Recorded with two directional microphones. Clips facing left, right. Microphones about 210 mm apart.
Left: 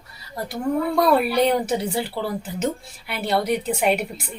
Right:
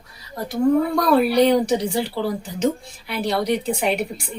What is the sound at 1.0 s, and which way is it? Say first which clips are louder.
Speech: right 2 dB; centre (ahead or behind).